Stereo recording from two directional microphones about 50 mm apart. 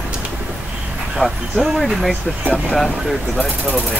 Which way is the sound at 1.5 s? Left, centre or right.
Centre.